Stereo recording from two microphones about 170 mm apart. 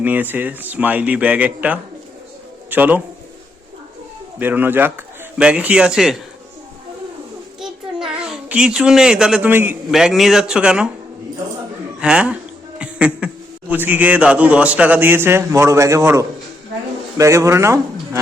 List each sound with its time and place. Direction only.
0.0 s a man's voice: 10° right (ahead or behind)
4.4 s speech: 10° right (ahead or behind)
7.6 s a sound: 5° right (ahead or behind)
9.9 s speech: centre (ahead or behind)
11.9 s a man's voice: 5° right (ahead or behind)